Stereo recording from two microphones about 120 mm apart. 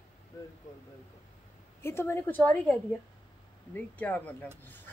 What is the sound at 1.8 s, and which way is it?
Speech, 20° left (ahead or behind).